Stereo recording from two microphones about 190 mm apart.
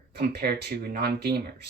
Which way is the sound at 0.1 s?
60° right (ahead or behind).